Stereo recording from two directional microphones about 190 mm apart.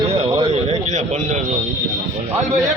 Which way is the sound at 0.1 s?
30° right (ahead or behind).